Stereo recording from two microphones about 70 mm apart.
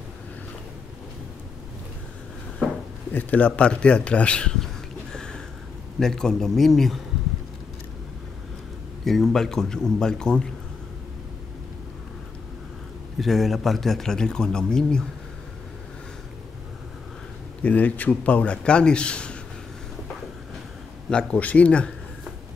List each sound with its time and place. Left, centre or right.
3.1 s a man's voice: left
5.1 s a sound: centre
5.9 s a man's voice: centre
9.0 s a man's voice: centre
13.2 s a man's voice: centre
17.6 s a man's voice: left
21.1 s a man's voice: centre